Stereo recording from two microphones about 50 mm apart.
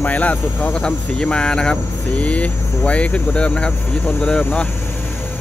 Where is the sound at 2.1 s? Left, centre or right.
Left.